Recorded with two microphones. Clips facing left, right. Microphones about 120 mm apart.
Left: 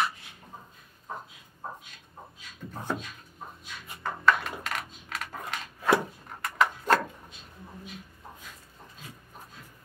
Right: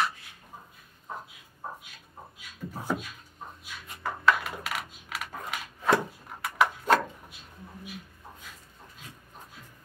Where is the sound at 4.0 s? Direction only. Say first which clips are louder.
Even; 5° right (ahead or behind).